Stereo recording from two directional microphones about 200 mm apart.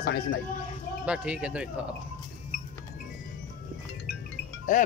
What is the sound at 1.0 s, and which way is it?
Speech, 5° right (ahead or behind).